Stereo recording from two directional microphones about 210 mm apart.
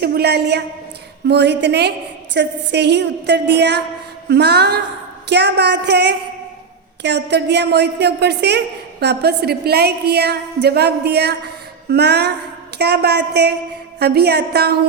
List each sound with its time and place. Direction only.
0.0 s a woman's voice: 50° right (ahead or behind)